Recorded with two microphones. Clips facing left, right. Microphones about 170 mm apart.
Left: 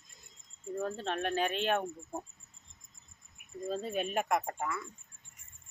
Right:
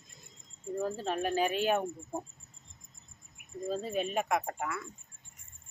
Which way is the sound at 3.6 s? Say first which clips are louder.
Right 1 dB; centre (ahead or behind).